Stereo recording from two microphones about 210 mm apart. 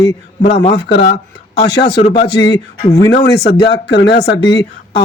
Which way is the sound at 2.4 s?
20° left (ahead or behind).